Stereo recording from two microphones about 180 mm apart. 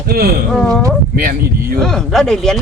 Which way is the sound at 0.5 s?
5° left (ahead or behind).